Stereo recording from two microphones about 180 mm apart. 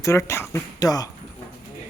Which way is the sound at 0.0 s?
15° left (ahead or behind).